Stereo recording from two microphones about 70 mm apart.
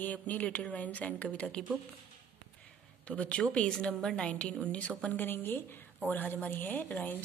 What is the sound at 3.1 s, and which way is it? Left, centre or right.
Speech, centre.